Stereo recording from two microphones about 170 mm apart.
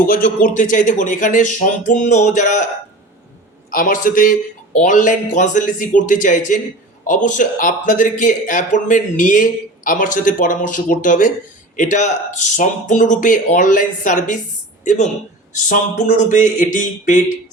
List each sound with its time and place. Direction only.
0.0 s speech: 55° left (ahead or behind)
3.7 s speech: 55° left (ahead or behind)